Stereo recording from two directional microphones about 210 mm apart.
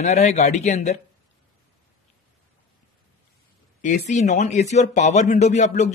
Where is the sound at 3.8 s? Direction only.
35° left (ahead or behind).